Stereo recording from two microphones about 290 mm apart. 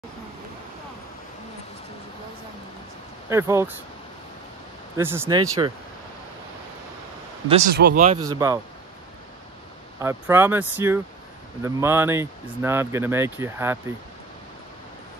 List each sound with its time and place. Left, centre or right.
3.3 s speech: centre
4.9 s speech: centre
7.7 s speech: right
8.2 s speech: centre
9.9 s speech: centre